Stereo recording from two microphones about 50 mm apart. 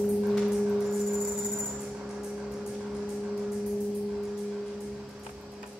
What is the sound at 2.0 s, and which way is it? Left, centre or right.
Vehicle, centre.